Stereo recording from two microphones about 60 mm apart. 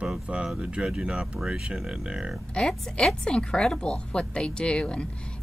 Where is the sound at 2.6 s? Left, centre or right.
Centre.